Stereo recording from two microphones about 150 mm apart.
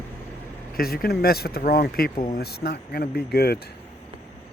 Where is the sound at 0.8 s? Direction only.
90° left.